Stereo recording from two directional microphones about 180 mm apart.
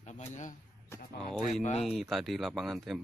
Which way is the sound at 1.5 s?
40° left (ahead or behind).